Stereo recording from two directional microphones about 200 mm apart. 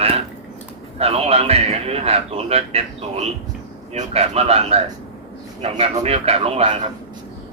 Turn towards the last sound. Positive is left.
turn(degrees=-30)  # may be behind; listen again after turning